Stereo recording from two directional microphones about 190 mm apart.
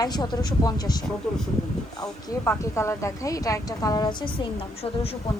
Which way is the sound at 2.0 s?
15° left (ahead or behind).